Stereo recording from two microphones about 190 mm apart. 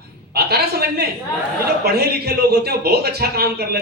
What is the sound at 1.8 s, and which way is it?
A man's voice, 55° right (ahead or behind).